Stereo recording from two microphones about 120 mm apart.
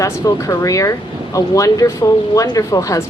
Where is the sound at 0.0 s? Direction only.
30° left (ahead or behind).